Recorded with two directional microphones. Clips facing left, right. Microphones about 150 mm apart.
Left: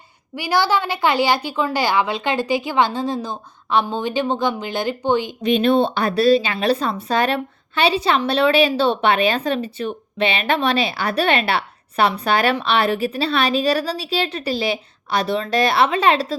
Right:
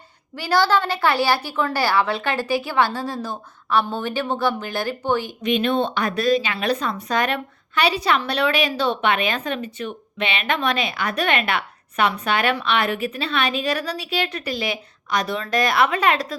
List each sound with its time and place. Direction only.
0.3 s a woman's voice: 10° left (ahead or behind)
5.4 s speech: 35° left (ahead or behind)